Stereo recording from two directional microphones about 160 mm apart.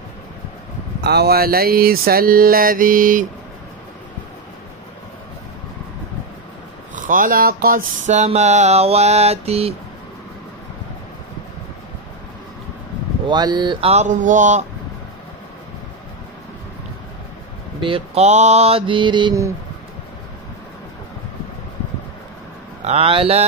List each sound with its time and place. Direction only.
1.0 s a sound: 90° right; by 3.3 s 55° right (ahead or behind)
7.0 s speech: 60° right (ahead or behind)
8.1 s mantra: 45° right (ahead or behind)
13.3 s mantra: 25° right (ahead or behind); by 14.7 s 50° right (ahead or behind)
17.7 s mantra: 35° right (ahead or behind)
22.8 s mantra: 40° right (ahead or behind)